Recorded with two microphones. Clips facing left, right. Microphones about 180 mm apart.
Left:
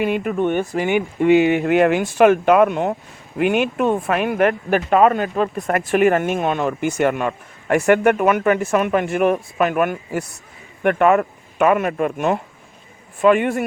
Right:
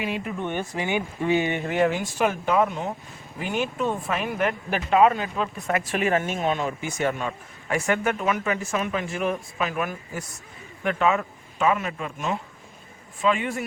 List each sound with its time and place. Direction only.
0.0 s speech: 60° left (ahead or behind)